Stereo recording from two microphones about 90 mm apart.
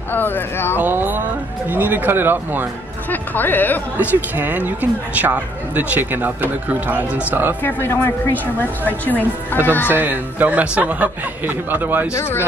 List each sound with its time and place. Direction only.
0.1 s speech: 20° left (ahead or behind)
0.7 s speech: 20° right (ahead or behind)
3.1 s speech: 20° left (ahead or behind)
3.9 s speech: 20° right (ahead or behind)
7.6 s speech: 25° left (ahead or behind)
9.9 s speech: 20° right (ahead or behind)
12.1 s speech: 30° left (ahead or behind)